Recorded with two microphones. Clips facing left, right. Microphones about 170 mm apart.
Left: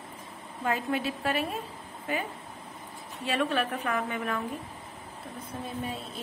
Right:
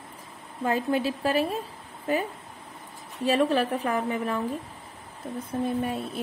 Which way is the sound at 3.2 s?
35° right (ahead or behind).